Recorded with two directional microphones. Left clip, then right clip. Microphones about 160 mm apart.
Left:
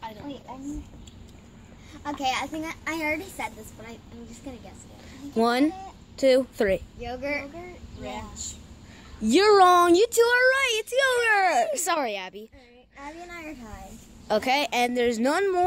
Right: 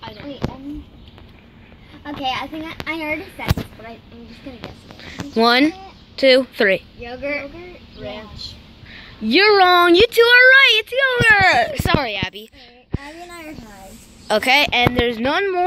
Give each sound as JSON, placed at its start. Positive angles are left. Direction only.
{"t": 2.0, "sound": "a woman's voice", "side_deg": -5}
{"t": 5.3, "sound": "speech", "side_deg": 0}
{"t": 9.2, "sound": "a woman's voice", "side_deg": 20}
{"t": 9.8, "sound": "a woman's voice", "side_deg": 0}
{"t": 11.7, "sound": "a woman's voice", "side_deg": 20}
{"t": 14.2, "sound": "speech", "side_deg": 0}
{"t": 14.7, "sound": "a woman's voice", "side_deg": 15}